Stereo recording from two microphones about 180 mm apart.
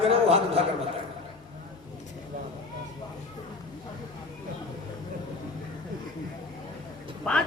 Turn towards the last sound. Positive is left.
turn(degrees=5)  # may be behind; listen again after turning